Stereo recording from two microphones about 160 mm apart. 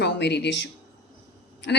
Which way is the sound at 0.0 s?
90° left.